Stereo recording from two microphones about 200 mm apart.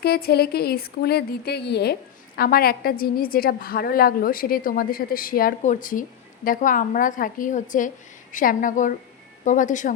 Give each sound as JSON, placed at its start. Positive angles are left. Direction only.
{"t": 0.0, "sound": "a woman's voice", "side_deg": 50}